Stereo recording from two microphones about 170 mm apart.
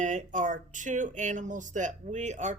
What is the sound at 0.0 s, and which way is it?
Speech, 50° right (ahead or behind).